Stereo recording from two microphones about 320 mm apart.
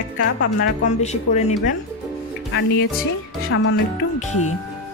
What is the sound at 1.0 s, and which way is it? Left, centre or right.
Speech, left.